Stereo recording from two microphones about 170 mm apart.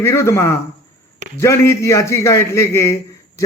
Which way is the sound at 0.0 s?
15° left (ahead or behind).